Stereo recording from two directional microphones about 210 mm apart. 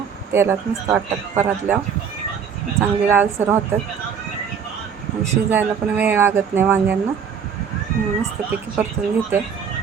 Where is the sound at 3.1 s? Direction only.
10° right (ahead or behind).